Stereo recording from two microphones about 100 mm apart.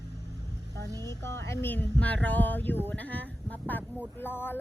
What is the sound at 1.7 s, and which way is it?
Speech, 15° left (ahead or behind).